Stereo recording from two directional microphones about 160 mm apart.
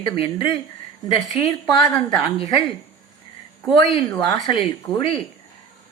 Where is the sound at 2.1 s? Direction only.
30° left (ahead or behind).